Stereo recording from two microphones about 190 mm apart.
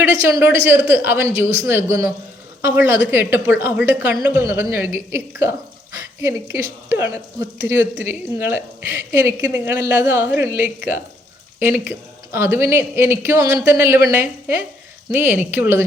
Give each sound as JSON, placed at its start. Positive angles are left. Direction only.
{"t": 0.0, "sound": "speech", "side_deg": -10}